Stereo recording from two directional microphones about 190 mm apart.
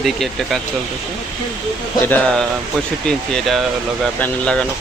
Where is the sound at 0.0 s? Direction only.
Centre (ahead or behind).